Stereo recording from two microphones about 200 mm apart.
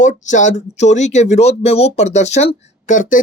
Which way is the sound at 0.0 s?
40° left (ahead or behind).